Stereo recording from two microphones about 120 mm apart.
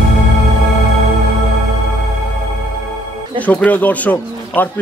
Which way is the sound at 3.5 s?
15° left (ahead or behind).